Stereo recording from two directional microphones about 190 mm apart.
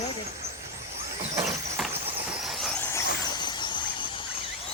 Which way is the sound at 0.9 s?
35° right (ahead or behind).